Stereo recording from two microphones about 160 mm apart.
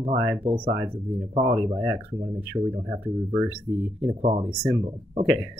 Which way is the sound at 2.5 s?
40° right (ahead or behind).